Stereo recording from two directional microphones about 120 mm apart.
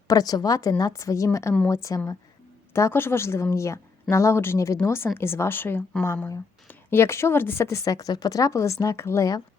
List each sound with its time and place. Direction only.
0.1 s a woman's voice: 30° left (ahead or behind)